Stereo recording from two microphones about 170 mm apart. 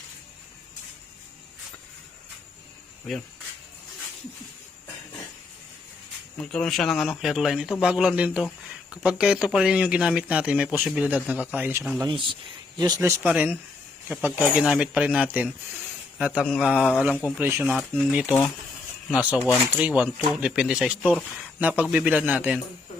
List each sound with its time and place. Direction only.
6.3 s speech: 5° left (ahead or behind); by 11.9 s 10° right (ahead or behind)
12.0 s a man's voice: 30° right (ahead or behind); by 22.6 s 10° right (ahead or behind)